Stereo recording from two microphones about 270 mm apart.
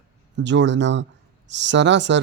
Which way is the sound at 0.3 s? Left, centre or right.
Right.